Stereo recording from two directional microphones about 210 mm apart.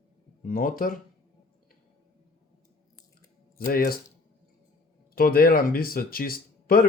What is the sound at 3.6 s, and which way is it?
Speech, 45° left (ahead or behind).